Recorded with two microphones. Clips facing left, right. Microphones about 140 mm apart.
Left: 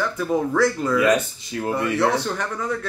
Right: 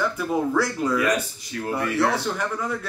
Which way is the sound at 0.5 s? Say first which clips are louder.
Left 3 dB; 10° right (ahead or behind).